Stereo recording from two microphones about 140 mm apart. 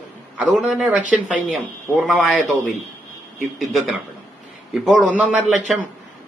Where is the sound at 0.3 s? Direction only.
10° right (ahead or behind).